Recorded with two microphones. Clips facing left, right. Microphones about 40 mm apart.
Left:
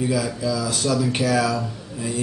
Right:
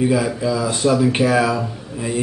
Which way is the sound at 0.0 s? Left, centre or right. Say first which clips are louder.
Right 5 dB; right.